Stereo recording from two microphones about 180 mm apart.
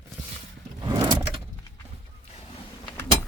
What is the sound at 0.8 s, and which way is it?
Vehicle, 20° right (ahead or behind).